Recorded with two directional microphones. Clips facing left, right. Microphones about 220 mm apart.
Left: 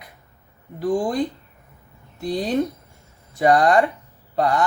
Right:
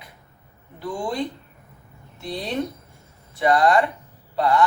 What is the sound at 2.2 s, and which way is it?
Speech, 45° left (ahead or behind).